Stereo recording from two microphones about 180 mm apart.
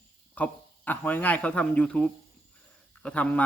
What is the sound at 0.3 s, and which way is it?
Speech, 10° left (ahead or behind).